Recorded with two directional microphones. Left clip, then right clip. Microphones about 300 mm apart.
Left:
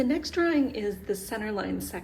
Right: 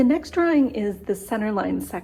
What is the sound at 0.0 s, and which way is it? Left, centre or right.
A woman's voice, centre.